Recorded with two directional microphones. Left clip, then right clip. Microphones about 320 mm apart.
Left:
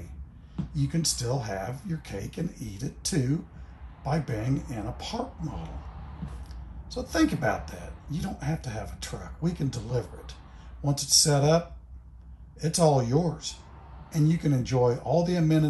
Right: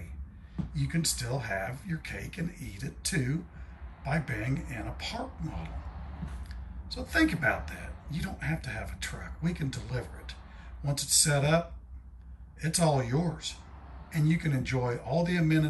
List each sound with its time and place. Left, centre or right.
0.7 s speech: centre
6.9 s speech: centre